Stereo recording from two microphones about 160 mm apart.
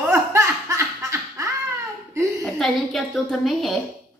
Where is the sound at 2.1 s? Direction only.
20° right (ahead or behind).